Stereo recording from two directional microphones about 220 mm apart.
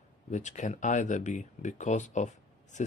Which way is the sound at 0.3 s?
35° left (ahead or behind).